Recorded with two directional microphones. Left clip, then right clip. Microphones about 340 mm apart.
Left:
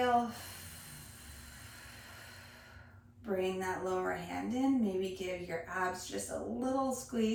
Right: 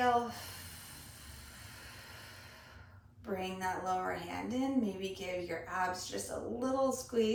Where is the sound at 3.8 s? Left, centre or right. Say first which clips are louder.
Even; centre.